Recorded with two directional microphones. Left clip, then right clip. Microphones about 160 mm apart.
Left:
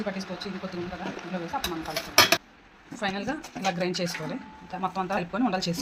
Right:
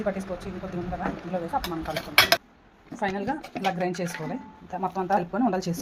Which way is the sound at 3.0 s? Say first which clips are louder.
Right 2 dB; 40° right (ahead or behind).